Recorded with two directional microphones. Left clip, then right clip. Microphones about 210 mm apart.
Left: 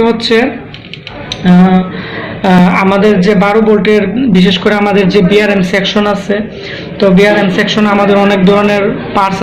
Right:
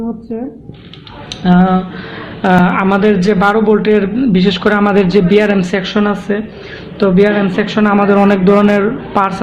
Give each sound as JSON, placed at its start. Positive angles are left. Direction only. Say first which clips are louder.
{"t": 1.5, "sound": "a man's voice", "louder": "left 2 dB", "side_deg": -40}